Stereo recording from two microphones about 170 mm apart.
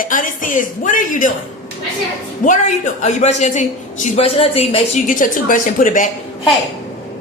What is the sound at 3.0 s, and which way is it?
A man's voice, 40° left (ahead or behind).